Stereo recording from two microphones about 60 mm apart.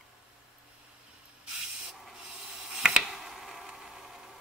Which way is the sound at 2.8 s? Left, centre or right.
Centre.